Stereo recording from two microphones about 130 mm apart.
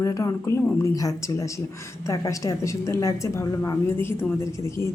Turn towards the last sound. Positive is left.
turn(degrees=20)  # may be behind; listen again after turning